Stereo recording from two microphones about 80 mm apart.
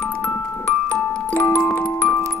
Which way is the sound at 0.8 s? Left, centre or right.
Centre.